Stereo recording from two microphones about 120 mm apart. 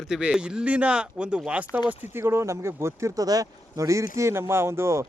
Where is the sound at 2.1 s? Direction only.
20° right (ahead or behind).